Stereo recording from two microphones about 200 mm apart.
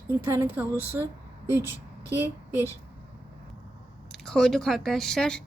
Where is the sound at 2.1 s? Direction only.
10° right (ahead or behind).